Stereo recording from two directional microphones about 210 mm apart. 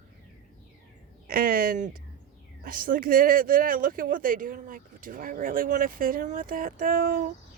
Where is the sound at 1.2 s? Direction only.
45° right (ahead or behind).